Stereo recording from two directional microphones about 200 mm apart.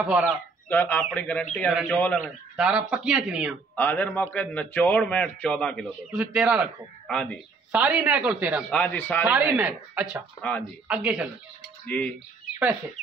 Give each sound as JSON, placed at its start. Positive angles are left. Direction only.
{"t": 0.0, "sound": "speech", "side_deg": -5}
{"t": 0.7, "sound": "a man's voice", "side_deg": 10}
{"t": 2.5, "sound": "speech", "side_deg": -5}
{"t": 3.7, "sound": "a man's voice", "side_deg": 10}
{"t": 7.8, "sound": "speech", "side_deg": -10}
{"t": 8.7, "sound": "a man's voice", "side_deg": 10}
{"t": 9.2, "sound": "speech", "side_deg": -5}